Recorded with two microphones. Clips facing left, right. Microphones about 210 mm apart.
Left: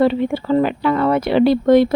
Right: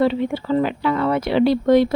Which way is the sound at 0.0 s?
55° left (ahead or behind).